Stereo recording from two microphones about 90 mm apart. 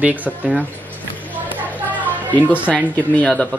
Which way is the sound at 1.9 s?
20° right (ahead or behind).